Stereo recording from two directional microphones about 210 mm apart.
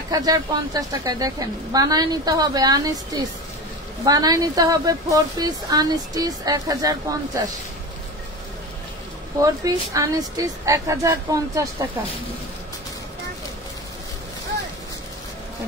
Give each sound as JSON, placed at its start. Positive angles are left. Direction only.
{"t": 0.1, "sound": "a woman's voice", "side_deg": -15}
{"t": 9.4, "sound": "a woman's voice", "side_deg": -15}